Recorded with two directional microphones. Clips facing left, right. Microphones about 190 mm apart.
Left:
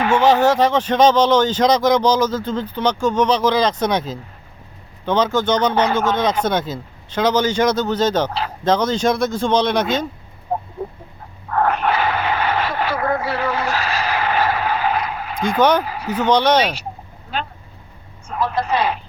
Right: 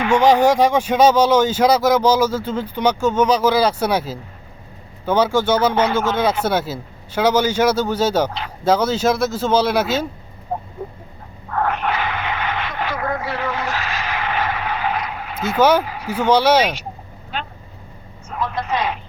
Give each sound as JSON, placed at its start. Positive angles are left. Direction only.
{"t": 0.1, "sound": "speech", "side_deg": -15}
{"t": 11.5, "sound": "a sound", "side_deg": 45}
{"t": 13.2, "sound": "vehicle", "side_deg": 40}
{"t": 15.4, "sound": "speech", "side_deg": -5}
{"t": 18.3, "sound": "speech", "side_deg": 35}